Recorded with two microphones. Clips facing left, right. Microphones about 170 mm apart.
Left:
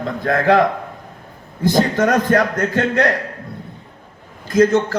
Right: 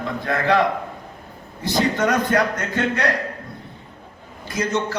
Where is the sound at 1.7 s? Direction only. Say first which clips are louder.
Left 3 dB; 50° left (ahead or behind).